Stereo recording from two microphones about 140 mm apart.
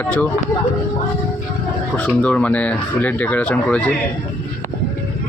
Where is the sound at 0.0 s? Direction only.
10° left (ahead or behind).